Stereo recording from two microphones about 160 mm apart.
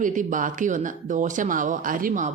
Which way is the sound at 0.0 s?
55° right (ahead or behind).